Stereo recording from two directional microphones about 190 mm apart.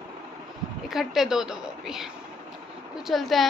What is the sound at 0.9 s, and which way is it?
Speech, centre (ahead or behind).